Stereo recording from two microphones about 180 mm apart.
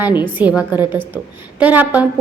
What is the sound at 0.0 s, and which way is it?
A woman's voice, 10° right (ahead or behind).